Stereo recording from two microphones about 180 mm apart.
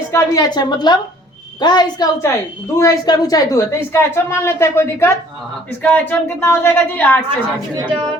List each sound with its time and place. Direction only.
0.1 s a woman's voice: 20° left (ahead or behind)